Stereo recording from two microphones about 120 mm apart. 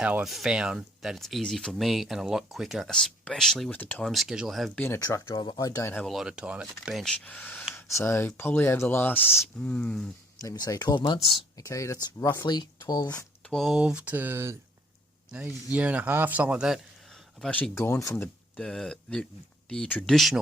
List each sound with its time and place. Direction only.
0.0 s speech: 10° right (ahead or behind)
3.7 s speech: 15° left (ahead or behind)
4.0 s speech: centre (ahead or behind)
4.9 s speech: 30° left (ahead or behind)
6.1 s speech: 5° right (ahead or behind)
7.0 s speech: 10° left (ahead or behind)
10.4 s speech: 30° left (ahead or behind)
12.5 s speech: 35° left (ahead or behind)
13.5 s speech: centre (ahead or behind)
17.4 s speech: 10° left (ahead or behind)
18.5 s speech: 5° left (ahead or behind)
20.1 s speech: centre (ahead or behind)